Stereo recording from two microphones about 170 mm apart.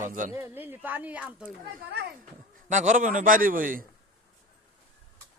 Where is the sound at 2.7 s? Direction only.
45° right (ahead or behind).